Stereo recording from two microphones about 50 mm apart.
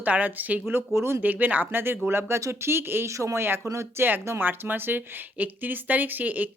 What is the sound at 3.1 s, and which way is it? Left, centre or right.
Speech, right.